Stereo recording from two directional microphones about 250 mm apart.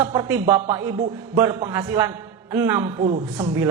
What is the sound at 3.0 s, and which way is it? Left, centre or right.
Speech, right.